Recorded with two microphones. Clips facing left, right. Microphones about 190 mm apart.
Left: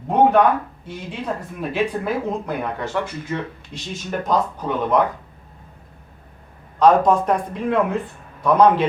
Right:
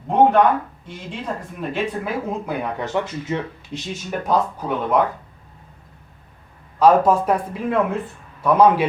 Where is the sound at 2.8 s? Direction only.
20° right (ahead or behind).